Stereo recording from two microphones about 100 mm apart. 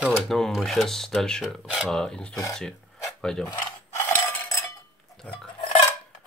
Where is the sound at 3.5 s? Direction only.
30° left (ahead or behind).